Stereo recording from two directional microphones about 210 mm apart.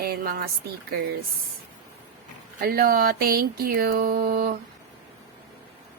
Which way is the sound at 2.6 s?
45° right (ahead or behind).